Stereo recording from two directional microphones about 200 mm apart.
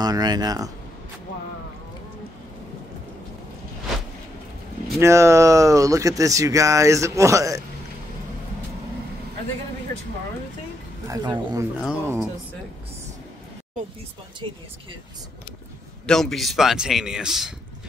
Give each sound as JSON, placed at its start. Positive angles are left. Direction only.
{"t": 0.0, "sound": "speech", "side_deg": -20}
{"t": 4.9, "sound": "speech", "side_deg": -15}
{"t": 11.1, "sound": "speech", "side_deg": -20}
{"t": 11.8, "sound": "a man's voice", "side_deg": -5}
{"t": 14.4, "sound": "speech", "side_deg": -25}
{"t": 16.1, "sound": "a man's voice", "side_deg": 0}